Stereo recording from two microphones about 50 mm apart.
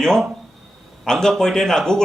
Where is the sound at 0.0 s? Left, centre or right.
Centre.